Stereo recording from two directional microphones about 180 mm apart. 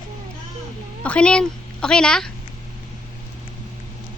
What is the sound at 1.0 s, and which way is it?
A woman's voice, 5° left (ahead or behind).